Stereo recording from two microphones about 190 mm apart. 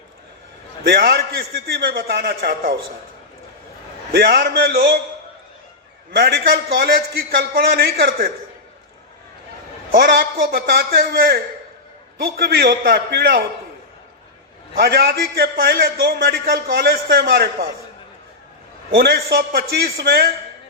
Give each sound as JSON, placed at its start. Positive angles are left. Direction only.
{"t": 0.9, "sound": "a man's voice", "side_deg": -55}
{"t": 4.1, "sound": "a man's voice", "side_deg": -55}
{"t": 6.1, "sound": "a man's voice", "side_deg": -55}
{"t": 9.9, "sound": "a man's voice", "side_deg": -50}
{"t": 14.8, "sound": "a man's voice", "side_deg": -55}
{"t": 18.9, "sound": "a man's voice", "side_deg": -55}